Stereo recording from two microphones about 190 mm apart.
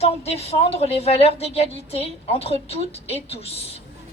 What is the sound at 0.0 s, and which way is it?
Speech, 35° left (ahead or behind).